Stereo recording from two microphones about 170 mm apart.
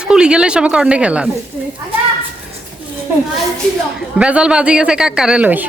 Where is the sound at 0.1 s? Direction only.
5° right (ahead or behind).